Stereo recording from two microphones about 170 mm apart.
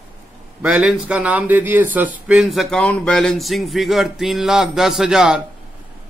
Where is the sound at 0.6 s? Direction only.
5° right (ahead or behind).